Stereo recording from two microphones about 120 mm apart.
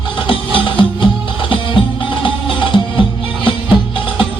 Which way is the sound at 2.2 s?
45° left (ahead or behind).